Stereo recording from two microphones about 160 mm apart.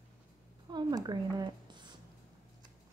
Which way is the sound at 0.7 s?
25° right (ahead or behind).